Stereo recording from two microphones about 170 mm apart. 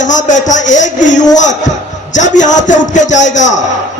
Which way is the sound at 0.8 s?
90° left.